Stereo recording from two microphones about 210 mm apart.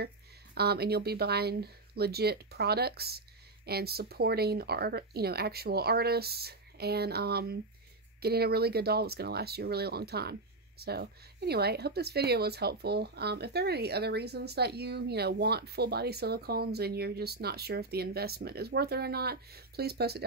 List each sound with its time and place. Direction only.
0.6 s speech: 50° right (ahead or behind)